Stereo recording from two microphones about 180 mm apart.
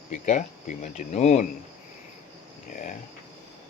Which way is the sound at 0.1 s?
45° left (ahead or behind).